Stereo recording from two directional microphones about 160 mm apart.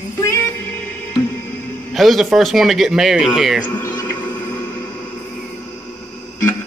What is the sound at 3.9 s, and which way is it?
Music, 25° left (ahead or behind).